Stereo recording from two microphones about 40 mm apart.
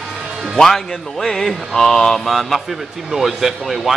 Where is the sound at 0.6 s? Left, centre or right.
Centre.